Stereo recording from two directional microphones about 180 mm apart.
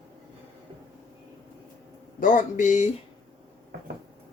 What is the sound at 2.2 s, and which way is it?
Speech, 45° left (ahead or behind).